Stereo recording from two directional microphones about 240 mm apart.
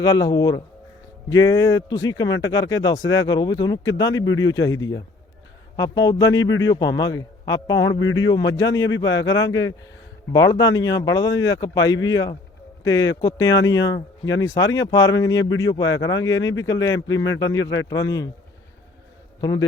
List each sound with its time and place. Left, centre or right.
0.0 s speech: centre
19.4 s a man's voice: centre